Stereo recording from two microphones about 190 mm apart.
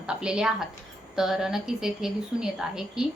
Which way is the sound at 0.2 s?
5° right (ahead or behind).